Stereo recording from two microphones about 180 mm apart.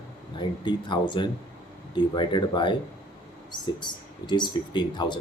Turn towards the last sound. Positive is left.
turn(degrees=25)  # may be behind; listen again after turning